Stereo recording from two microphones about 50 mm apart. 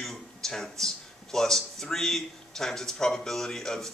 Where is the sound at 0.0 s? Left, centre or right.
Centre.